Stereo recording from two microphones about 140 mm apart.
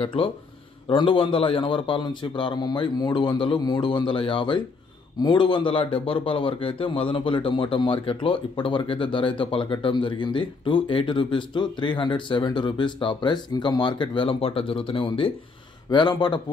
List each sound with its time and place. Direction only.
0.0 s a man's voice: 40° left (ahead or behind)